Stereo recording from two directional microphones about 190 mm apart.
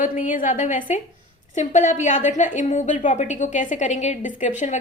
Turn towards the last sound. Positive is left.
turn(degrees=40)  # may be behind; listen again after turning